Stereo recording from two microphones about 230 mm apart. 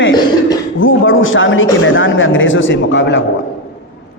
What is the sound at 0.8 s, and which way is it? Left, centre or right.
A man's voice, left.